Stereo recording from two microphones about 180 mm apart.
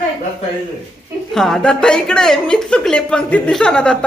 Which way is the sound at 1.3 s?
Centre (ahead or behind).